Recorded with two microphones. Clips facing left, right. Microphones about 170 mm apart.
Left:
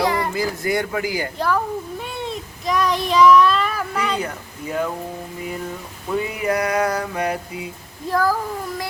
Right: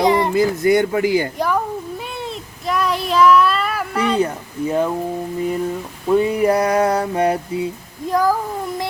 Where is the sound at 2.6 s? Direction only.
5° right (ahead or behind).